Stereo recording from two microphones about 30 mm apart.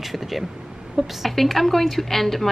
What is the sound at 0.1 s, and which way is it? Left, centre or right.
Speech, centre.